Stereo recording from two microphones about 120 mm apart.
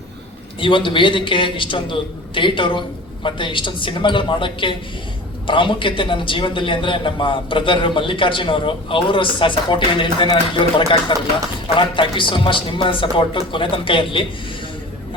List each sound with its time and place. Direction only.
0.6 s a man's voice: 45° left (ahead or behind)